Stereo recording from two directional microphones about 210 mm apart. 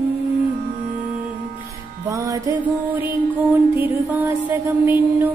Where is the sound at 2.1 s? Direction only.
15° right (ahead or behind).